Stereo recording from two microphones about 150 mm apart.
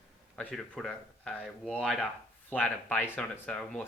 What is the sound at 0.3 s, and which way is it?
Speech, 5° left (ahead or behind).